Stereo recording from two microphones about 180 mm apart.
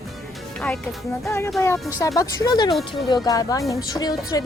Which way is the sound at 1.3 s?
15° left (ahead or behind).